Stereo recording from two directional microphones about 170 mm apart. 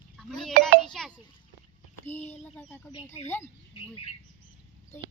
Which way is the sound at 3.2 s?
15° left (ahead or behind).